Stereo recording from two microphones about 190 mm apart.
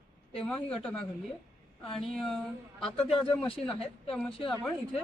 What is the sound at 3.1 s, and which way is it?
Speech, 30° left (ahead or behind).